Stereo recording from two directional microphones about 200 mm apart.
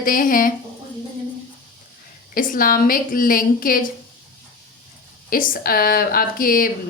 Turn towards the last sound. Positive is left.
turn(degrees=45)  # may be behind; listen again after turning